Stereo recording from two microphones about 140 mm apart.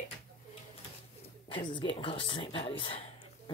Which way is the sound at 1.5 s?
35° left (ahead or behind).